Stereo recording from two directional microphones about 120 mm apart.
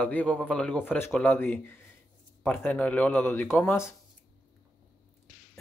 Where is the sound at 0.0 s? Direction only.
10° left (ahead or behind).